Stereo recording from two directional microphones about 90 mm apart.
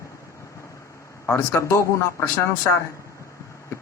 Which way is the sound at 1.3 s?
30° left (ahead or behind).